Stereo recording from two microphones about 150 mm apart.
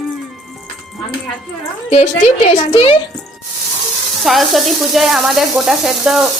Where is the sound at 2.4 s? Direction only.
40° left (ahead or behind).